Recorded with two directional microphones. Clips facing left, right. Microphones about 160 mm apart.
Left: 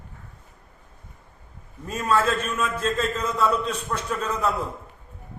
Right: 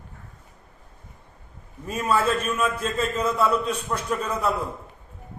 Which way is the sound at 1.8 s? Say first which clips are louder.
Even; 10° right (ahead or behind).